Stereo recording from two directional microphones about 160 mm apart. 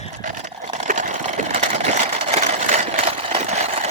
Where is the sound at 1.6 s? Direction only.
45° right (ahead or behind).